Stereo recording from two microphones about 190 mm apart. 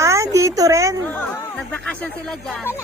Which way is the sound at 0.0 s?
15° right (ahead or behind).